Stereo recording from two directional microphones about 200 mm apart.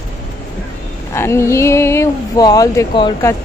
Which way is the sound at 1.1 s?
15° left (ahead or behind).